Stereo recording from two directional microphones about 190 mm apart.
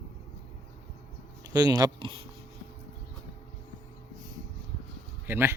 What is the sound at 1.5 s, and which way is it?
Speech, 20° right (ahead or behind).